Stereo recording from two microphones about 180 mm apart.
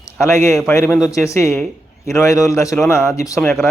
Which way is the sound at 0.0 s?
15° left (ahead or behind).